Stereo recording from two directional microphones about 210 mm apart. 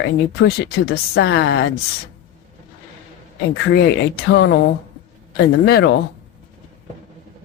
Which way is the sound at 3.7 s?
50° left (ahead or behind).